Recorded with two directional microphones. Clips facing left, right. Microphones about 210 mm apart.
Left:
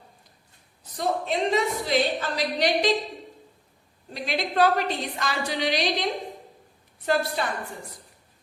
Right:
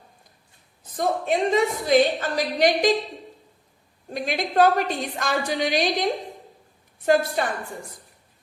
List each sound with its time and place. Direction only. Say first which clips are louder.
0.9 s a woman's voice: right 3 dB; 50° right (ahead or behind)
4.1 s a woman's voice: right 3 dB; 50° right (ahead or behind)